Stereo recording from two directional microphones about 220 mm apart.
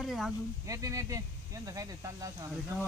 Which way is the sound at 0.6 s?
15° right (ahead or behind).